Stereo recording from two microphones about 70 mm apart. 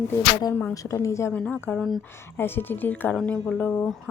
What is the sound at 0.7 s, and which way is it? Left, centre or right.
Speech, left.